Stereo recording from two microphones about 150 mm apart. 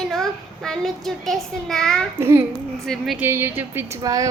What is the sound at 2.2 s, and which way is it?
Speech, 15° right (ahead or behind).